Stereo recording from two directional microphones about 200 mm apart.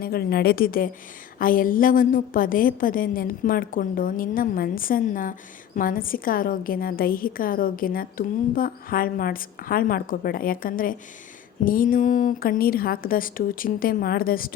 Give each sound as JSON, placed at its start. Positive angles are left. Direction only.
{"t": 0.0, "sound": "a woman's voice", "side_deg": 50}